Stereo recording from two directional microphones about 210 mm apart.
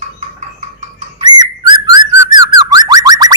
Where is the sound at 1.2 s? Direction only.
20° right (ahead or behind).